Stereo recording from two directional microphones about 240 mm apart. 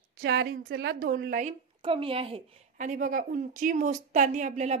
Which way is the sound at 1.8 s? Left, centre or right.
Right.